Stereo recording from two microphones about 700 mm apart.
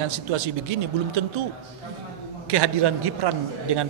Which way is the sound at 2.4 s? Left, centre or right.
Right.